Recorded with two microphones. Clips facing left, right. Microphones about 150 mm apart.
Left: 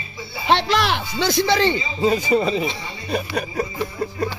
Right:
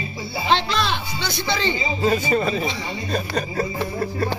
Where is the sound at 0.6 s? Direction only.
85° left.